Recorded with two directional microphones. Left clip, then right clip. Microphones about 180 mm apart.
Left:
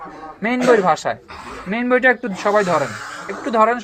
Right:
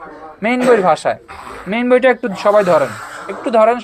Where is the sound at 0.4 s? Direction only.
25° right (ahead or behind).